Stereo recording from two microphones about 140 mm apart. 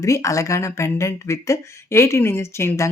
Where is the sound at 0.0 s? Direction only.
25° left (ahead or behind).